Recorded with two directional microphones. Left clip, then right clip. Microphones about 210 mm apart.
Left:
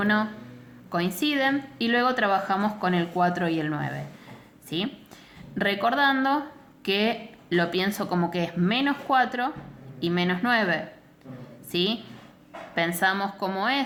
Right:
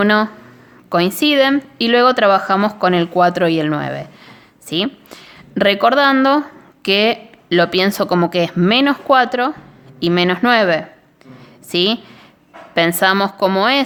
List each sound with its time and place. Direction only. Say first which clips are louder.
0.0 s a woman's voice: right 11 dB; 50° right (ahead or behind)